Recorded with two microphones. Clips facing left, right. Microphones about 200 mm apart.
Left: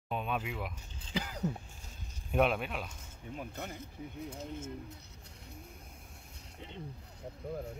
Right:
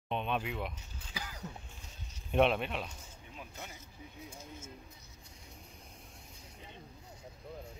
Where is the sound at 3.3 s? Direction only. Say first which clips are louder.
Left 7 dB; 55° left (ahead or behind).